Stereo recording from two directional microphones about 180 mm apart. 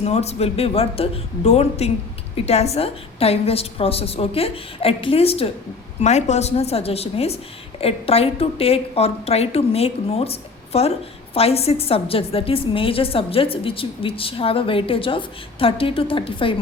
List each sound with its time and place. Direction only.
0.0 s a woman's voice: 35° left (ahead or behind)